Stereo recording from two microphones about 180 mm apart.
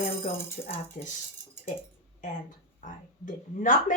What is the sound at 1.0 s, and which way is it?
Speech, 45° left (ahead or behind).